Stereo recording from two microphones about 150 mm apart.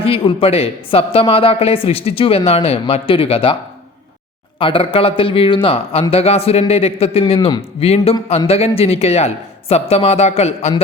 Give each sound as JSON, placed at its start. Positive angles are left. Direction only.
{"t": 0.0, "sound": "speech", "side_deg": 40}
{"t": 4.6, "sound": "speech", "side_deg": 35}
{"t": 7.3, "sound": "a man's voice", "side_deg": 30}
{"t": 7.8, "sound": "speech", "side_deg": 40}